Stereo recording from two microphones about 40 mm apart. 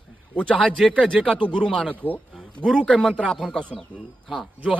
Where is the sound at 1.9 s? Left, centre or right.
Left.